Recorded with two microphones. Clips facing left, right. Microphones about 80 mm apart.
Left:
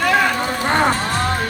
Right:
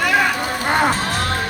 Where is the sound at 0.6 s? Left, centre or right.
Centre.